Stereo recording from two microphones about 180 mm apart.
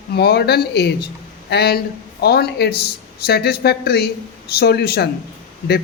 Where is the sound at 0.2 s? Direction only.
65° left (ahead or behind).